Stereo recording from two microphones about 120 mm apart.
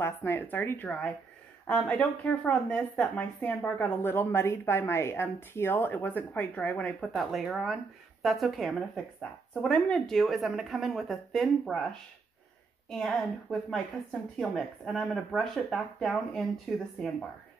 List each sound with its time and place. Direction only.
0.0 s speech: 20° left (ahead or behind)
12.9 s speech: centre (ahead or behind)